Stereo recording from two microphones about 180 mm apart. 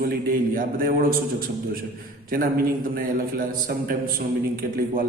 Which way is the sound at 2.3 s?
50° right (ahead or behind).